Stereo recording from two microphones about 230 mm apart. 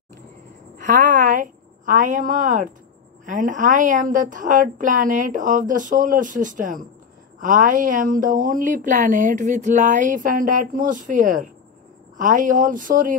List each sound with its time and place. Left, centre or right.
0.7 s a woman's voice: right